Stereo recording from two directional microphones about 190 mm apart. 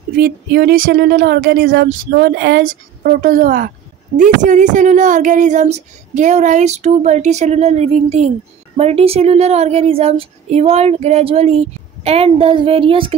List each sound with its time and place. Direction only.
0.2 s a woman's voice: 55° right (ahead or behind); by 13.1 s 30° right (ahead or behind)